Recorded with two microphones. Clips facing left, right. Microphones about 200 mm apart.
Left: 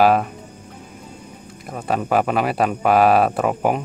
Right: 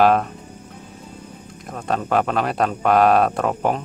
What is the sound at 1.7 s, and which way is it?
Speech, 5° left (ahead or behind).